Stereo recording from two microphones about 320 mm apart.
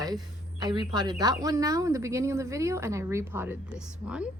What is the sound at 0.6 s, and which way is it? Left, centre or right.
A woman's voice, centre.